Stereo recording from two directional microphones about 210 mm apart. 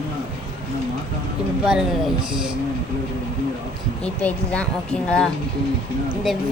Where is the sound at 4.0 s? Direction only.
5° left (ahead or behind).